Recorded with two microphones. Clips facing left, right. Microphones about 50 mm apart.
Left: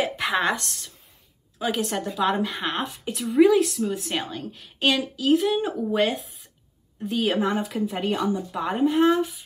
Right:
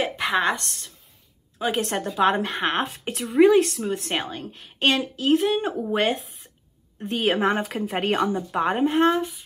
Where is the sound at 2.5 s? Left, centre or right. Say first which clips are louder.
Right 4 dB; right.